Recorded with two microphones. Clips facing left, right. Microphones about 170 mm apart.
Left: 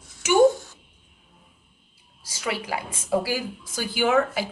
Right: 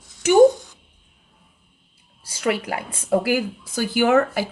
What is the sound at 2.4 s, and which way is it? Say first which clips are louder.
A woman's voice: right 5 dB; 55° right (ahead or behind).